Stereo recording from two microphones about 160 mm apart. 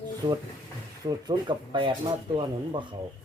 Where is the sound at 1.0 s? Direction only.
25° right (ahead or behind).